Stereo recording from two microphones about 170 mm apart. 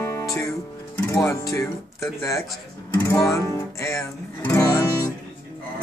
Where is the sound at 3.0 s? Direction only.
15° left (ahead or behind).